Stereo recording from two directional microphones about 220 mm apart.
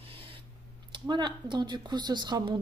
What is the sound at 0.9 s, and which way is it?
Speech, 20° right (ahead or behind).